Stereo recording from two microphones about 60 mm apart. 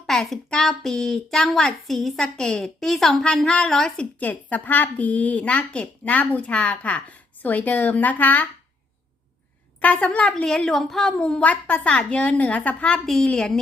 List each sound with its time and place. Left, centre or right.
0.0 s a woman's voice: centre
3.3 s a woman's voice: centre
4.2 s a woman's voice: left
9.8 s a woman's voice: left